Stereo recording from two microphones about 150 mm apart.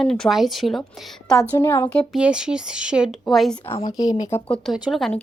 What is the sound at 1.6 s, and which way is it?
Speech, 20° left (ahead or behind).